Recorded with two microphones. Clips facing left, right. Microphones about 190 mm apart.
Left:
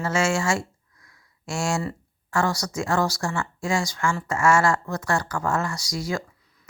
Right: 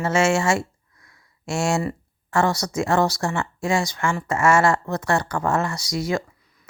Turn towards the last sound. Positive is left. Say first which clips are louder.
# right 4 dB
turn(degrees=-20)  # may be behind; listen again after turning